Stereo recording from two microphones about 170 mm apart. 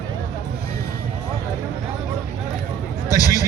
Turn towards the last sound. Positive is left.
turn(degrees=20)  # may be behind; listen again after turning